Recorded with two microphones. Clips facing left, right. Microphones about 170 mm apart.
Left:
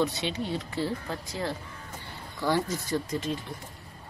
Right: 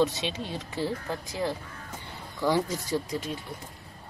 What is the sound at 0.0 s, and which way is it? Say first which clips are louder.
Speech: right 1 dB; 20° right (ahead or behind).